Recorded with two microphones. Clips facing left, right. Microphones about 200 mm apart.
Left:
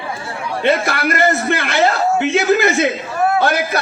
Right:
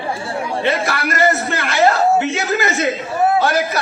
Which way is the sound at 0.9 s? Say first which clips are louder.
Left 1 dB; 60° left (ahead or behind).